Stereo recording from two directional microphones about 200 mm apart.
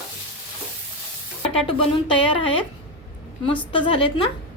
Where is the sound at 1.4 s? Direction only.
25° left (ahead or behind).